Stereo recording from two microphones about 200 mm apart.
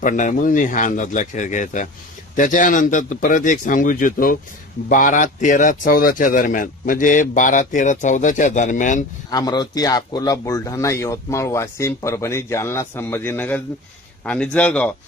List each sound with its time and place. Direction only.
0.0 s speech: 40° left (ahead or behind)
9.3 s speech: 20° left (ahead or behind)